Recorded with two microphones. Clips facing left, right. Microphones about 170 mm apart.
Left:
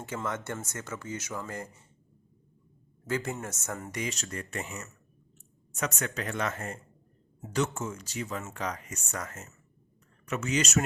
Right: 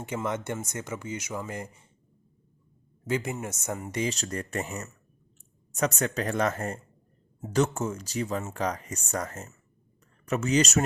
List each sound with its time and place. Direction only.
0.0 s speech: 15° right (ahead or behind)
3.1 s speech: 20° right (ahead or behind)
4.0 s speech: 35° right (ahead or behind)